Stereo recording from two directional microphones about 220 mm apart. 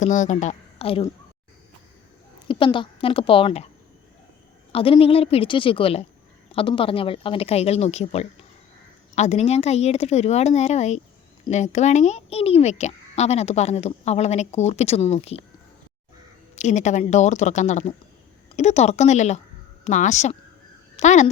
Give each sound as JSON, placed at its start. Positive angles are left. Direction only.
{"t": 0.0, "sound": "a woman's voice", "side_deg": 35}
{"t": 2.5, "sound": "a woman's voice", "side_deg": 25}
{"t": 4.7, "sound": "a woman's voice", "side_deg": 25}
{"t": 16.6, "sound": "a woman's voice", "side_deg": 30}